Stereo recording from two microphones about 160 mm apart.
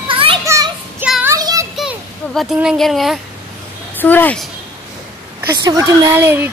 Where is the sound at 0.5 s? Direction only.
20° right (ahead or behind).